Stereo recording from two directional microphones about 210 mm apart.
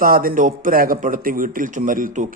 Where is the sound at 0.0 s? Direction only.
45° right (ahead or behind).